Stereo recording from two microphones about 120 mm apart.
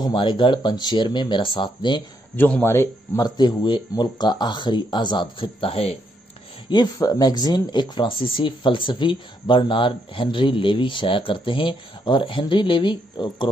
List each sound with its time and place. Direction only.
0.0 s speech: 40° left (ahead or behind)
2.3 s a man's voice: 15° left (ahead or behind)
3.2 s speech: 35° left (ahead or behind); by 5.9 s 55° left (ahead or behind)
6.7 s speech: 35° left (ahead or behind)